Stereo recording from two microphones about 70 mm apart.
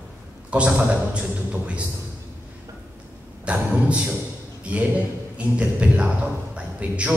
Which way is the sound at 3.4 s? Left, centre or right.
Centre.